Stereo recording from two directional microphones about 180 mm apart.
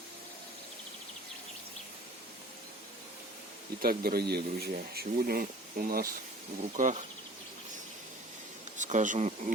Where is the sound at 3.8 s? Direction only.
55° right (ahead or behind).